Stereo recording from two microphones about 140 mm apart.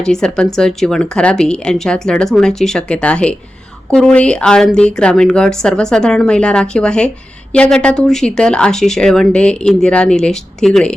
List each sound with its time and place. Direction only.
0.0 s speech: 5° left (ahead or behind)